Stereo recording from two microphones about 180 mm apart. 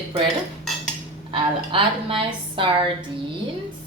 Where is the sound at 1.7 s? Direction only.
30° right (ahead or behind).